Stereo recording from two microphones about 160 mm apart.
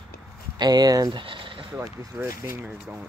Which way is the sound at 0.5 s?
25° right (ahead or behind).